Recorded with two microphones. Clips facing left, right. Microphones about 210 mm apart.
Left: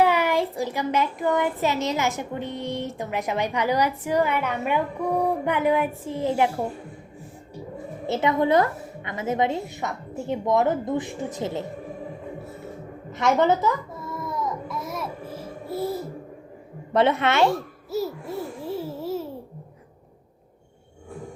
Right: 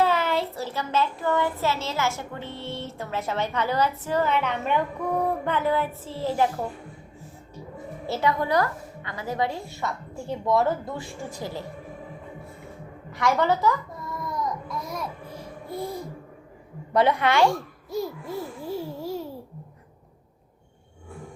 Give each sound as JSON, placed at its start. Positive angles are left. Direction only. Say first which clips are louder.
{"t": 0.0, "sound": "a child's voice", "louder": "left 3 dB", "side_deg": 15}
{"t": 8.0, "sound": "a woman's voice", "louder": "left 3 dB", "side_deg": 20}
{"t": 13.1, "sound": "a woman's voice", "louder": "left 3 dB", "side_deg": 20}
{"t": 13.9, "sound": "music", "louder": "left 1 dB", "side_deg": 0}
{"t": 16.9, "sound": "a woman's voice", "louder": "left 1 dB", "side_deg": 25}
{"t": 17.9, "sound": "a child's voice", "louder": "left 2 dB", "side_deg": 5}